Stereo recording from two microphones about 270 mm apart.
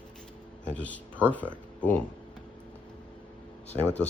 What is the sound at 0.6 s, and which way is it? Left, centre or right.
Speech, centre.